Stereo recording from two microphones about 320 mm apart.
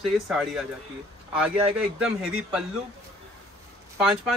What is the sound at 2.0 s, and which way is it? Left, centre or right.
Speech, centre.